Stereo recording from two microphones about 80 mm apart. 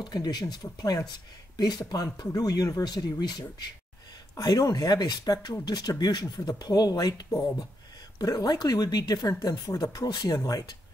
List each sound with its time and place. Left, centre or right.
0.0 s speech: left